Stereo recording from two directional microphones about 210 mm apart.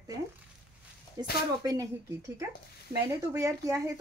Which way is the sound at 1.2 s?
20° right (ahead or behind).